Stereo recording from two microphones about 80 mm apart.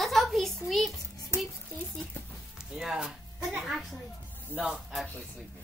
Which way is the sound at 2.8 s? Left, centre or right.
Centre.